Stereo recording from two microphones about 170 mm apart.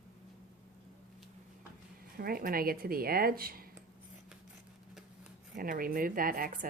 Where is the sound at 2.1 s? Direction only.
60° right (ahead or behind).